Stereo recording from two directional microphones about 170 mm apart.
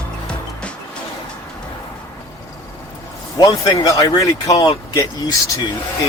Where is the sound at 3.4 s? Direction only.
25° left (ahead or behind).